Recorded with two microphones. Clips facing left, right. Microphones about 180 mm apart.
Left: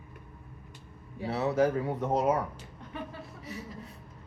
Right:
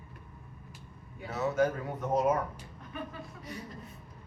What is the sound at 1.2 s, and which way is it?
A man's voice, 30° left (ahead or behind).